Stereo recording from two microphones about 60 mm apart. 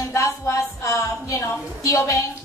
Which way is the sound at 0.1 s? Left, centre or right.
Left.